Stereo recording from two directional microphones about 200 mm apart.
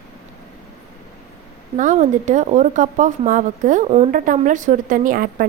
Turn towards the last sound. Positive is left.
turn(degrees=-45)  # may be behind; listen again after turning